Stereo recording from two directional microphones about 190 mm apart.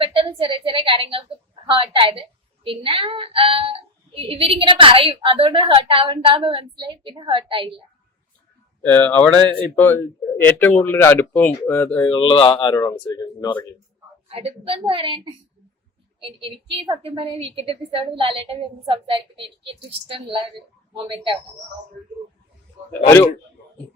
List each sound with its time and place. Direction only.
0.0 s a woman's voice: 30° right (ahead or behind)
8.8 s speech: 10° left (ahead or behind)
12.1 s speech: 25° left (ahead or behind)
14.3 s a woman's voice: 30° right (ahead or behind)